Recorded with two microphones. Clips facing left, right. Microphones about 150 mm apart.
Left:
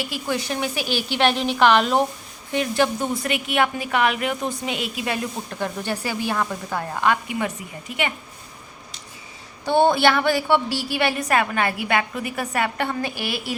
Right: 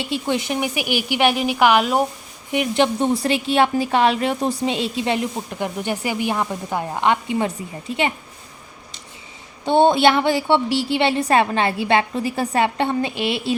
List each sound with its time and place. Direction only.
0.0 s speech: 25° right (ahead or behind)
2.5 s a woman's voice: 20° right (ahead or behind)
9.6 s a woman's voice: 20° right (ahead or behind)